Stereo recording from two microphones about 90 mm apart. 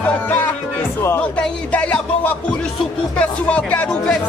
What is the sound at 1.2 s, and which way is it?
Speech, 15° left (ahead or behind).